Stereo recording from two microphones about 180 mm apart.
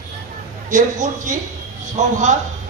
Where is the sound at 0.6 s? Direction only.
45° right (ahead or behind).